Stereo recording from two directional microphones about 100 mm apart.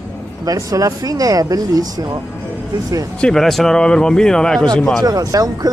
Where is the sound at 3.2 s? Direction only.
5° left (ahead or behind).